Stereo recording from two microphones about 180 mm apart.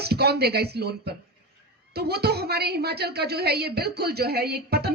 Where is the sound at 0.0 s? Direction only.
65° right (ahead or behind).